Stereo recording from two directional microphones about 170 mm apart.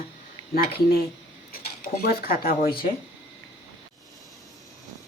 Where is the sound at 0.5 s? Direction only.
65° left (ahead or behind).